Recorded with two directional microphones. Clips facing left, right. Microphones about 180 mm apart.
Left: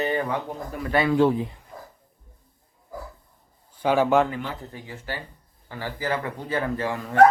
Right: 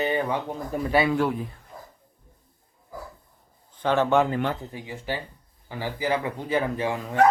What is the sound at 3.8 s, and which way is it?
Speech, 10° left (ahead or behind).